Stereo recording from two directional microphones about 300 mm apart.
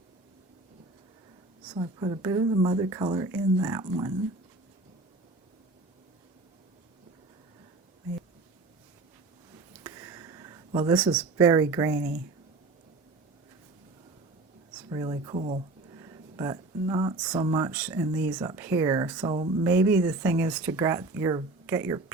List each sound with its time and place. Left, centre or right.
1.7 s speech: centre
9.8 s a sound: centre
11.2 s speech: centre
14.8 s speech: centre